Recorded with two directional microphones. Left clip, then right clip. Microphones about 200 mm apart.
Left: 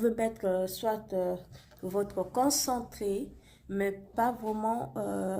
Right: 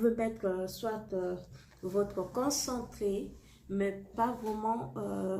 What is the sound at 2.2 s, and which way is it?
Speech, 50° left (ahead or behind).